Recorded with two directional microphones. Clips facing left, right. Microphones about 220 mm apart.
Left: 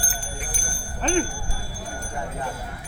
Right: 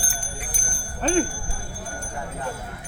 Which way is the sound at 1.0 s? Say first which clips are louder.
Right 2 dB; 45° right (ahead or behind).